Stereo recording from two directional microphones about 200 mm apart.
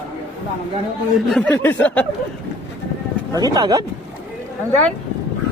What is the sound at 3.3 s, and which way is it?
Speech, 20° right (ahead or behind).